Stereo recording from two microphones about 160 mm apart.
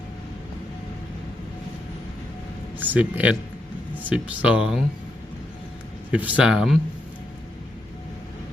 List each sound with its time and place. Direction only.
2.7 s speech: 10° right (ahead or behind)
6.1 s speech: 10° right (ahead or behind)